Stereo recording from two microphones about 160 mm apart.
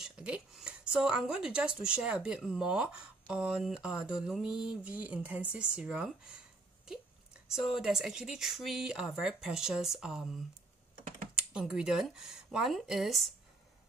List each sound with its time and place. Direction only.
0.0 s speech: 5° right (ahead or behind)
7.5 s speech: centre (ahead or behind)